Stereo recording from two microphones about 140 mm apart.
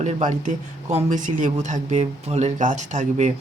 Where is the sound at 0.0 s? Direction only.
55° right (ahead or behind).